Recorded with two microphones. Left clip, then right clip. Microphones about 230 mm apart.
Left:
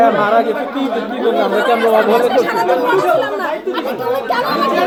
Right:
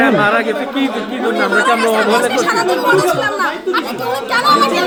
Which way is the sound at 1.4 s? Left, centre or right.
Right.